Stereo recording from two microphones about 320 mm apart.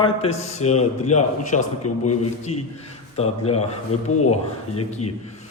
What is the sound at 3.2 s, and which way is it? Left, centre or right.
Speech, centre.